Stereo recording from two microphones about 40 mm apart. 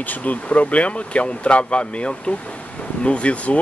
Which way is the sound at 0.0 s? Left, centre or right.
Left.